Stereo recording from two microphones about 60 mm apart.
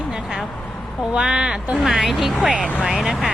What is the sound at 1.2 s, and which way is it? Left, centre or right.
Speech, centre.